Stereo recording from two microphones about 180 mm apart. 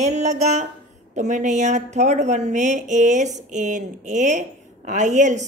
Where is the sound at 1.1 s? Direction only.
40° right (ahead or behind).